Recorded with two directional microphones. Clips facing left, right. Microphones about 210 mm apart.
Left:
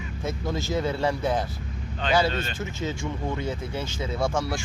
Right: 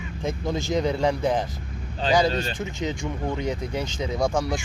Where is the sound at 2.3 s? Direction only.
35° right (ahead or behind).